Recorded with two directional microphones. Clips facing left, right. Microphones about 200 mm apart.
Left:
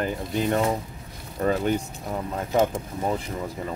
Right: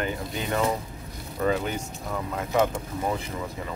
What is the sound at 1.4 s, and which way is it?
Speech, 40° left (ahead or behind).